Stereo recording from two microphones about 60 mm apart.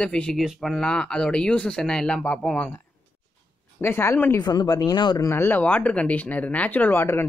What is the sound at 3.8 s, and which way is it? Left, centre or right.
Speech, left.